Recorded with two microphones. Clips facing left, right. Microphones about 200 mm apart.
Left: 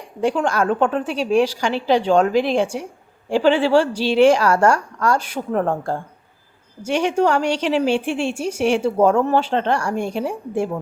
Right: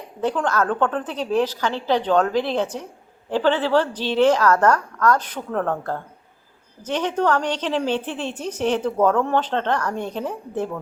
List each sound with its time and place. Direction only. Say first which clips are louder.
0.2 s a woman's voice: left 3 dB; 10° left (ahead or behind)
5.5 s a woman's voice: left 3 dB; 25° left (ahead or behind)
6.8 s a woman's voice: left 3 dB; 10° left (ahead or behind)